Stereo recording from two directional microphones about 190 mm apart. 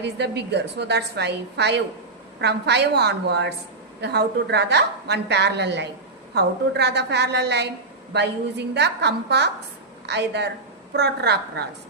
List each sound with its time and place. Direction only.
0.0 s a woman's voice: 65° right (ahead or behind)